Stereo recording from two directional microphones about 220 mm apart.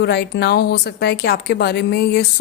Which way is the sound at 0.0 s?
50° left (ahead or behind).